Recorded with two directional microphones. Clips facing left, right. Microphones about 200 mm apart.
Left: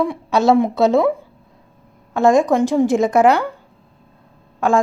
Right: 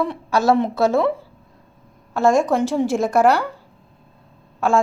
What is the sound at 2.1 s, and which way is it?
A woman's voice, 15° left (ahead or behind).